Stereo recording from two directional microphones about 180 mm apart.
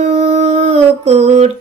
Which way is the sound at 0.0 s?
40° right (ahead or behind).